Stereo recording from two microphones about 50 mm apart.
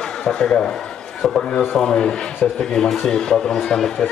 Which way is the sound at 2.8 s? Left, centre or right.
Centre.